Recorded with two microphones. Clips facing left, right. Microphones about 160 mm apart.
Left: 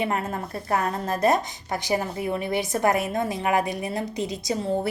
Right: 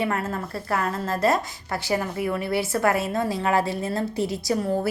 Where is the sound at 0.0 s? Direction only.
20° left (ahead or behind).